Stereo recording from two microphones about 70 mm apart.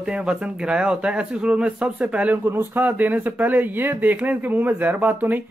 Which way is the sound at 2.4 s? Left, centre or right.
Right.